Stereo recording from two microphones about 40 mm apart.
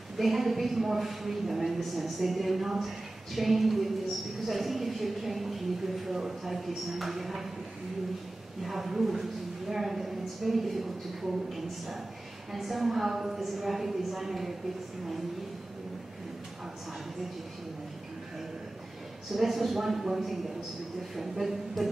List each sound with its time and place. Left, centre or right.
0.2 s a woman's voice: centre
8.6 s a woman's voice: centre
19.3 s a woman's voice: centre